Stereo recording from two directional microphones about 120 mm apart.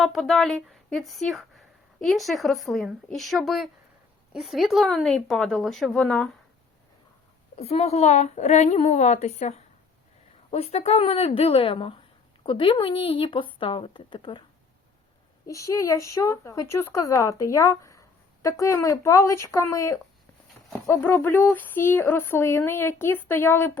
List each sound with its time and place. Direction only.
0.0 s a woman's voice: centre (ahead or behind)
7.5 s a woman's voice: 55° left (ahead or behind)
10.5 s speech: 60° left (ahead or behind)
15.4 s speech: 25° left (ahead or behind)